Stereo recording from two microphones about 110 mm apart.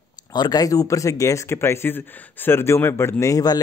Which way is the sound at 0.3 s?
40° left (ahead or behind).